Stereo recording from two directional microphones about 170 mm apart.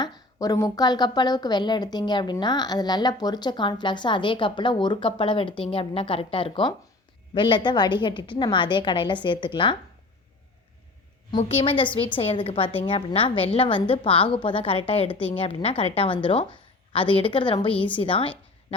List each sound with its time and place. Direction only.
0.3 s a woman's voice: 20° left (ahead or behind)
11.3 s a woman's voice: 35° left (ahead or behind)